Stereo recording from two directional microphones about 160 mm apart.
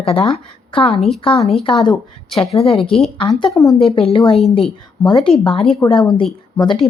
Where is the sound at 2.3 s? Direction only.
40° left (ahead or behind).